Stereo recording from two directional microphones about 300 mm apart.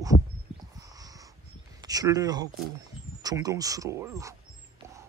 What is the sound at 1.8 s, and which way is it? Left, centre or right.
Speech, centre.